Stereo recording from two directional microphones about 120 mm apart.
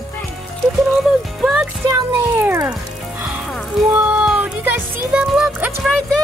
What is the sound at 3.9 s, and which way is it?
Music, 10° right (ahead or behind).